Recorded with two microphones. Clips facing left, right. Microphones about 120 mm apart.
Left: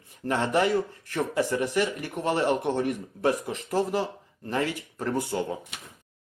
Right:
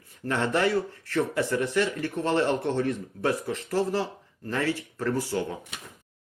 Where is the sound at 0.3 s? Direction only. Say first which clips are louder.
Left 1 dB; 15° left (ahead or behind).